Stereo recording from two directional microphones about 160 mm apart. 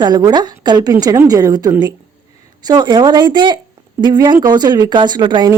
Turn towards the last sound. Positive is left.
turn(degrees=-30)  # may be behind; listen again after turning